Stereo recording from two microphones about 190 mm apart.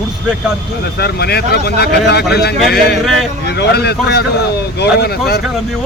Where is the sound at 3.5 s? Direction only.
60° left (ahead or behind).